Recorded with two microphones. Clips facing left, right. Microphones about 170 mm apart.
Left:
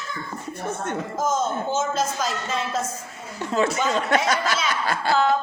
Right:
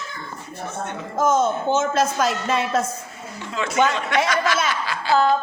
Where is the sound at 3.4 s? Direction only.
40° left (ahead or behind).